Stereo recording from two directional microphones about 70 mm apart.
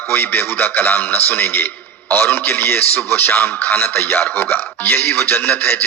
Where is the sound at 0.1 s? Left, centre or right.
Left.